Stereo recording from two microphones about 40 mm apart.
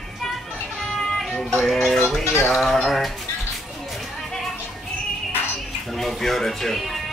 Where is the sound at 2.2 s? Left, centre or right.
Left.